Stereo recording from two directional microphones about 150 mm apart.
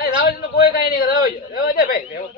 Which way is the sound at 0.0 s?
90° left.